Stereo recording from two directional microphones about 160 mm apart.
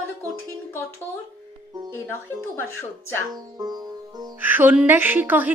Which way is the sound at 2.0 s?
15° left (ahead or behind).